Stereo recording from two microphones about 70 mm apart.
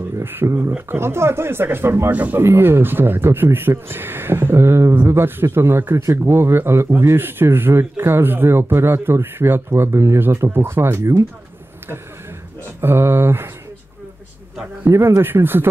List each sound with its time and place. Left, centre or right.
0.2 s speech: right
2.1 s speech: right
2.4 s speech: right
12.8 s speech: right
14.9 s speech: right